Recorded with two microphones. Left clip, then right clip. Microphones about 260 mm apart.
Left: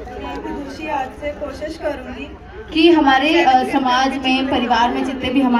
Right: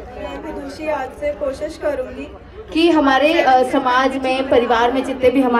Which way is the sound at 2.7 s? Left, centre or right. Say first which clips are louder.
Left 1 dB; centre.